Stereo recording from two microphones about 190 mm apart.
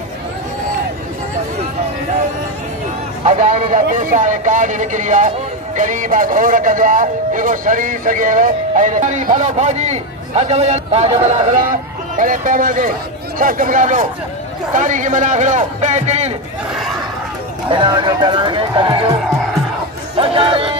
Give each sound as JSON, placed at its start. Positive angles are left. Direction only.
{"t": 3.3, "sound": "speech", "side_deg": -40}
{"t": 17.6, "sound": "speech", "side_deg": -25}
{"t": 20.2, "sound": "a sound", "side_deg": -30}